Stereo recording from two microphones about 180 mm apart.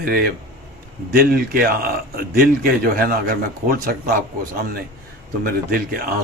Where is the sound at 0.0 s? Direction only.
55° right (ahead or behind).